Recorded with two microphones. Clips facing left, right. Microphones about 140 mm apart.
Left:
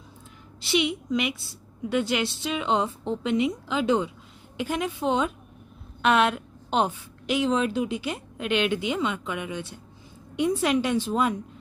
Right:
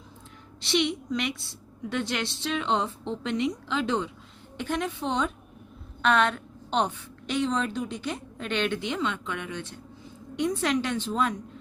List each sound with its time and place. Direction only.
0.6 s a woman's voice: 5° left (ahead or behind)